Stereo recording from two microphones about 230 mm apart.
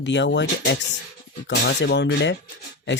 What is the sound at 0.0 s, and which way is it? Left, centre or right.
Speech, left.